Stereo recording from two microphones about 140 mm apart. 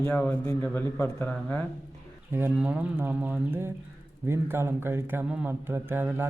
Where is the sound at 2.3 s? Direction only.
10° right (ahead or behind).